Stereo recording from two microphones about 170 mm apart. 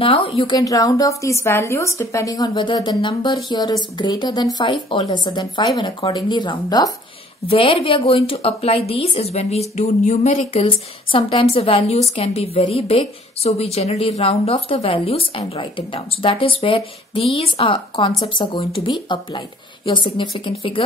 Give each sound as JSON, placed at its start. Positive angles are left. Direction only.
{"t": 0.0, "sound": "a woman's voice", "side_deg": 35}